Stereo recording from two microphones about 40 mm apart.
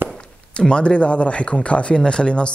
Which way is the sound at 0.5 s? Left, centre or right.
Left.